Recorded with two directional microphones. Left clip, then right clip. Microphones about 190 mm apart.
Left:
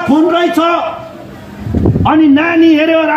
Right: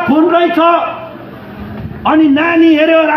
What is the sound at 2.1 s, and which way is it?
A man's voice, 15° left (ahead or behind).